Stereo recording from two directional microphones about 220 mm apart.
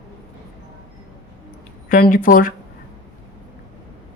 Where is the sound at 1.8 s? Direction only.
40° left (ahead or behind).